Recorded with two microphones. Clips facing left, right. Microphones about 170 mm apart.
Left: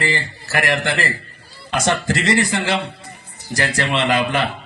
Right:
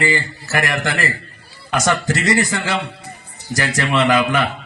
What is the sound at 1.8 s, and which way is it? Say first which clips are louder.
A man's voice: even; 30° left (ahead or behind).